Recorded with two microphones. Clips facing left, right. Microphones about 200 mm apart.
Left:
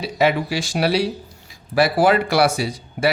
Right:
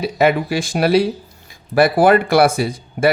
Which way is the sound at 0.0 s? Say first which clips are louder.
Right 3 dB; 55° right (ahead or behind).